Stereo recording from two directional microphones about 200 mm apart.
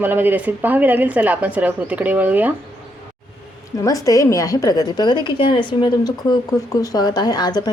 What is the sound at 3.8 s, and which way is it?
A woman's voice, 15° left (ahead or behind).